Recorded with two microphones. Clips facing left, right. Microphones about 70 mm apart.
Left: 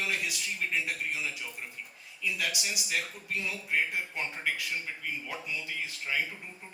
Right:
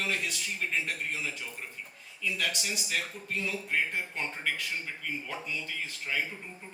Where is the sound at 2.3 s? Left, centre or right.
Centre.